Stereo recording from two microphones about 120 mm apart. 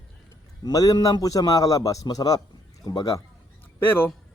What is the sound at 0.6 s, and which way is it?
A man's voice, 30° left (ahead or behind).